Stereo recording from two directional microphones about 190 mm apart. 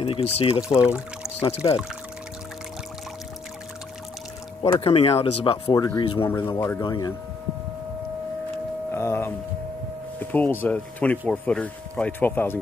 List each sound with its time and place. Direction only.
0.0 s speech: 30° left (ahead or behind)
0.8 s speech: 5° right (ahead or behind)
1.6 s speech: 25° left (ahead or behind)
4.7 s speech: 30° left (ahead or behind)
5.9 s speech: 15° left (ahead or behind)
8.9 s a sound: 15° left (ahead or behind)
10.1 s speech: 10° left (ahead or behind)